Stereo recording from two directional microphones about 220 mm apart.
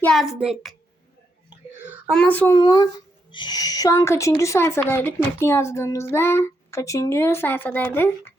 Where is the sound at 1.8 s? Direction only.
5° right (ahead or behind).